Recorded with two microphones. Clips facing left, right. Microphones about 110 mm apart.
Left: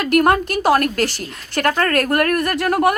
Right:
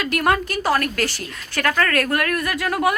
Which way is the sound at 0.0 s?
45° left (ahead or behind).